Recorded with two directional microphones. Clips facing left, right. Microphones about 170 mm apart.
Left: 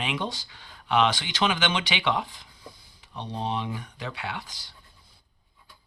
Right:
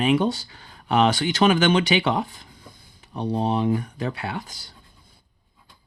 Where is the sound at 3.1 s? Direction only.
40° right (ahead or behind).